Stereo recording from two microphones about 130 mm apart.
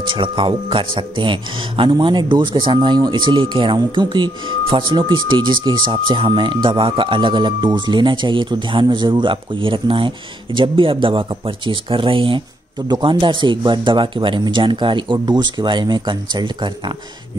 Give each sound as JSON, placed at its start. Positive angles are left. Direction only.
{"t": 0.0, "sound": "speech", "side_deg": -40}